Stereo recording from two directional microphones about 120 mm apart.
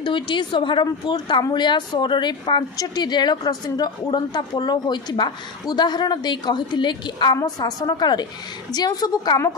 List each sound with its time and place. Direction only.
0.0 s a woman's voice: 40° left (ahead or behind)